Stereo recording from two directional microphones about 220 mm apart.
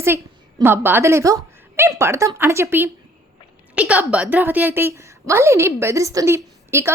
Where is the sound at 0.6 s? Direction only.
10° right (ahead or behind).